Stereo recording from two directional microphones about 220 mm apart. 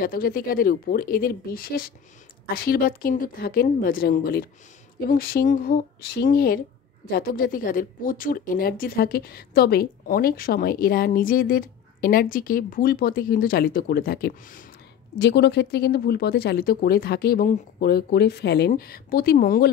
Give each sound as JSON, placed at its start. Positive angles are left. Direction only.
{"t": 0.0, "sound": "a woman's voice", "side_deg": 40}